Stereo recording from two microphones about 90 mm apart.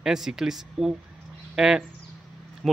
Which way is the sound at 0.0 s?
5° right (ahead or behind).